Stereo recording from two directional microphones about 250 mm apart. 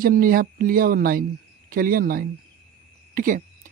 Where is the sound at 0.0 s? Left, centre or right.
Right.